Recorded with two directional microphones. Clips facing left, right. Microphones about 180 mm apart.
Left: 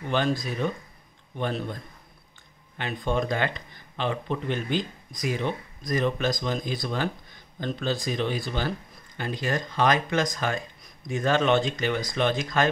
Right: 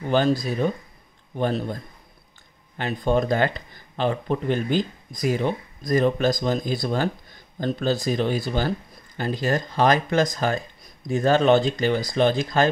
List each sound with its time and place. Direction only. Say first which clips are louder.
0.1 s speech: right 5 dB; 40° right (ahead or behind)
2.8 s speech: right 5 dB; 40° right (ahead or behind)